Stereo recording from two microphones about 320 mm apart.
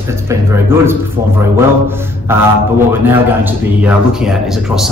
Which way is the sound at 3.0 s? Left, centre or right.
Centre.